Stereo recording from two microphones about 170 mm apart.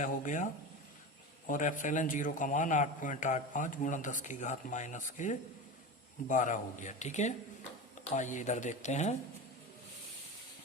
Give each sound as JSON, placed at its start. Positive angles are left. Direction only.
{"t": 0.0, "sound": "a man's voice", "side_deg": 50}